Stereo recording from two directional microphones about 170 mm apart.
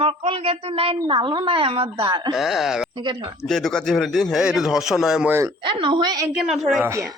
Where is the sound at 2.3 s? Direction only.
Centre (ahead or behind).